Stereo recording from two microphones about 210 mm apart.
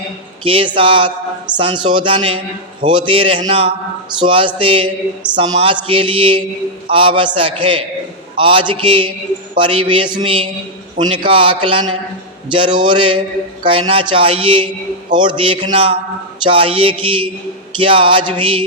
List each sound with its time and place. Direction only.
0.4 s speech: 25° right (ahead or behind)